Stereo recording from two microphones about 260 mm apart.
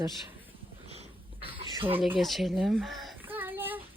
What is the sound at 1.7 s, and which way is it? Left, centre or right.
Speech, centre.